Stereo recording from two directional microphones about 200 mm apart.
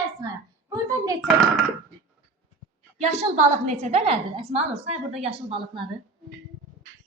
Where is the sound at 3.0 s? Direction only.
35° right (ahead or behind).